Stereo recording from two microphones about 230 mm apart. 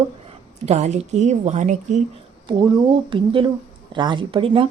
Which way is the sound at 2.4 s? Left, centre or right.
Centre.